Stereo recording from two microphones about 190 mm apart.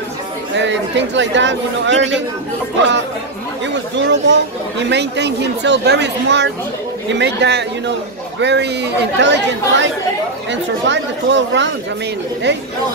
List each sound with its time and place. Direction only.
0.6 s speech: 70° right (ahead or behind)
3.6 s speech: 70° right (ahead or behind)